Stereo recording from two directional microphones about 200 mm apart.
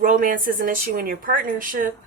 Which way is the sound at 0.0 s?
45° right (ahead or behind).